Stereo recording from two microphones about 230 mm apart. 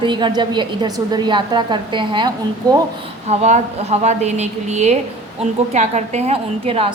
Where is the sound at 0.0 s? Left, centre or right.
Centre.